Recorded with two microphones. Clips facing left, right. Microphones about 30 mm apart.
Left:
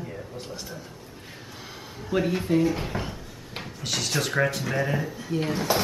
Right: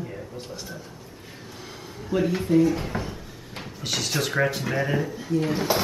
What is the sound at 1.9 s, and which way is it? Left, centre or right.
Speech, centre.